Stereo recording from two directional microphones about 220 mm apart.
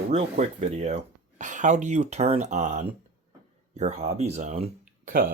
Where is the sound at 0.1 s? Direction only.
30° right (ahead or behind).